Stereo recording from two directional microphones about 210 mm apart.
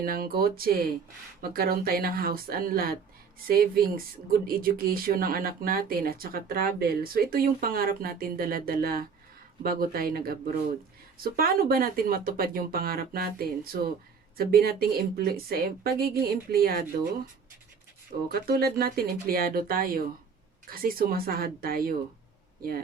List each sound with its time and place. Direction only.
0.0 s speech: 45° right (ahead or behind)
18.3 s speech: 45° right (ahead or behind)